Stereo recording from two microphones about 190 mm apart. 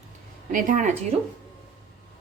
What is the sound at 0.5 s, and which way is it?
Speech, 45° right (ahead or behind).